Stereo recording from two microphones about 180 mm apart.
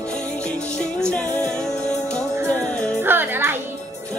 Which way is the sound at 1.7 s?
40° left (ahead or behind).